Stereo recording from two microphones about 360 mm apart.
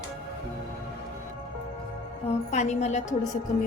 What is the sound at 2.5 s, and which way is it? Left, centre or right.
Speech, centre.